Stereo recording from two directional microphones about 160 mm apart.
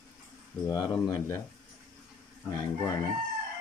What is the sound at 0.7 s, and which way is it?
Speech, 25° left (ahead or behind).